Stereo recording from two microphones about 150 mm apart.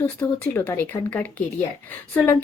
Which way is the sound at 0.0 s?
10° left (ahead or behind).